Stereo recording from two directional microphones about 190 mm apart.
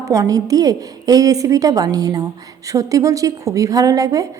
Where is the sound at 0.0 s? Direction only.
15° right (ahead or behind).